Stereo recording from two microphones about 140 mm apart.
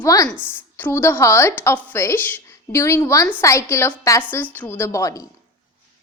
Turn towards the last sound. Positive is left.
turn(degrees=25)  # may be behind; listen again after turning